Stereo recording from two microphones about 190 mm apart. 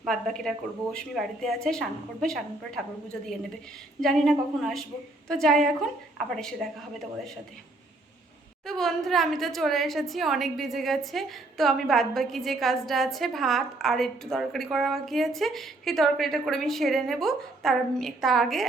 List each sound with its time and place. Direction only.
0.0 s a woman's voice: centre (ahead or behind)
8.6 s a woman's voice: centre (ahead or behind)